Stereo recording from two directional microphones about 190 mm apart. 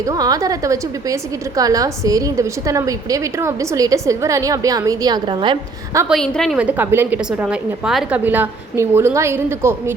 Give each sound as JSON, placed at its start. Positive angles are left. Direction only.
{"t": 0.0, "sound": "a woman's voice", "side_deg": -20}
{"t": 6.1, "sound": "a woman's voice", "side_deg": 5}